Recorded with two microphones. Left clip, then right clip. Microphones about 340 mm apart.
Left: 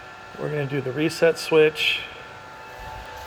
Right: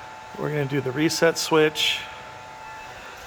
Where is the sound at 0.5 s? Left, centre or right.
Centre.